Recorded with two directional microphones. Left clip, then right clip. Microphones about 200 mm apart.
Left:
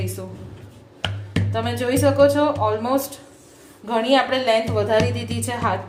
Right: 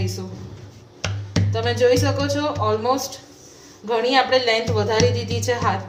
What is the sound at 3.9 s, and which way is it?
A woman's voice, 20° left (ahead or behind).